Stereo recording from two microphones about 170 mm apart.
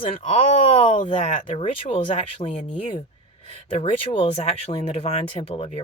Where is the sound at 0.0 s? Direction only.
40° left (ahead or behind).